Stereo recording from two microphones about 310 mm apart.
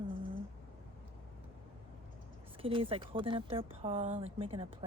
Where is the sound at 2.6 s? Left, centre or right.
Centre.